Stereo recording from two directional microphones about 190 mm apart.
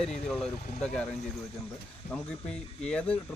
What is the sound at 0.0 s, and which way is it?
Speech, 35° left (ahead or behind).